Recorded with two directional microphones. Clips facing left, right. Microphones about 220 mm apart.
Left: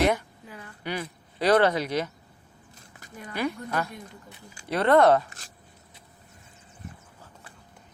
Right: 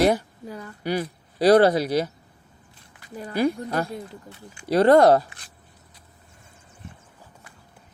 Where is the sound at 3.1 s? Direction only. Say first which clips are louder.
Right 7 dB; 35° right (ahead or behind).